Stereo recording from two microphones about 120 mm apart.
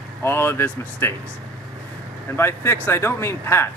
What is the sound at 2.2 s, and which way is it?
Speech, 20° left (ahead or behind).